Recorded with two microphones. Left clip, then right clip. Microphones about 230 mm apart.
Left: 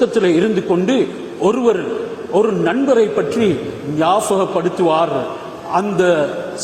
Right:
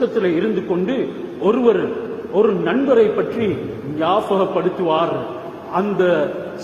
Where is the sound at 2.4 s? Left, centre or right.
Left.